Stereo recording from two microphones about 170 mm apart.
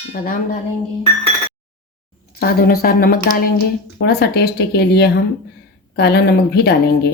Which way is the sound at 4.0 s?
75° left (ahead or behind).